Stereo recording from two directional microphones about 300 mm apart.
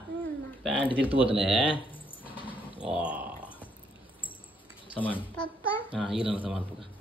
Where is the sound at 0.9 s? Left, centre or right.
Centre.